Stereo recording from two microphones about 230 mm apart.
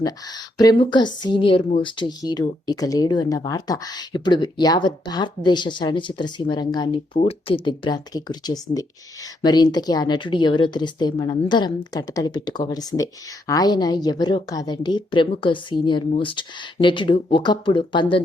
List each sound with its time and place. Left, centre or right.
0.0 s speech: centre